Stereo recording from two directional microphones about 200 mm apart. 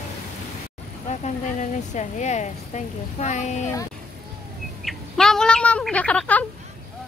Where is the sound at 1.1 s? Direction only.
35° left (ahead or behind).